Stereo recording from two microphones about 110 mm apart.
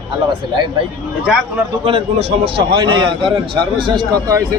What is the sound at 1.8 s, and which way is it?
A man's voice, 60° right (ahead or behind).